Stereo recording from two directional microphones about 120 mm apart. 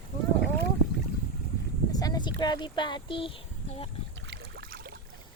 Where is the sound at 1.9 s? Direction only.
30° left (ahead or behind); by 3.8 s 45° left (ahead or behind).